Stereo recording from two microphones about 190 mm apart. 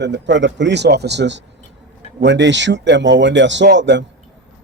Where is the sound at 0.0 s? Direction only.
70° right (ahead or behind).